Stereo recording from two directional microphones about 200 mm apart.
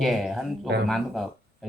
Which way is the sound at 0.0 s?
Centre (ahead or behind).